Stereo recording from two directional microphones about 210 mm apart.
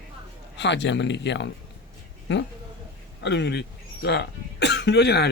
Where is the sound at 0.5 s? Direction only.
55° left (ahead or behind).